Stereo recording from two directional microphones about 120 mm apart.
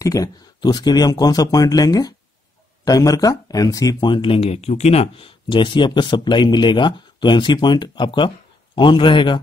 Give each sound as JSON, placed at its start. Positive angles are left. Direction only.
{"t": 0.0, "sound": "speech", "side_deg": 30}